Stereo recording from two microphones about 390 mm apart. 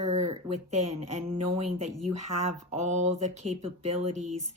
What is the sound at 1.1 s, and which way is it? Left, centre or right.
Speech, centre.